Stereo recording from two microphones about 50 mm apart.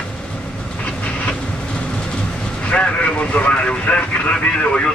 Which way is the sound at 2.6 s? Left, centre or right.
Left.